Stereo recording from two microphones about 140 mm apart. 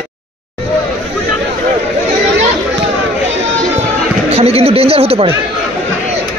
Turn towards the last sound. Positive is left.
turn(degrees=-45)  # may be behind; listen again after turning